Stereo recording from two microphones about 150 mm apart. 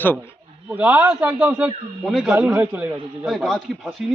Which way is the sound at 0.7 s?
10° right (ahead or behind).